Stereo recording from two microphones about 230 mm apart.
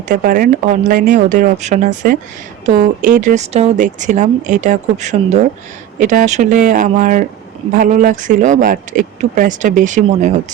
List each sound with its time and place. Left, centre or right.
0.1 s speech: right
3.2 s speech: right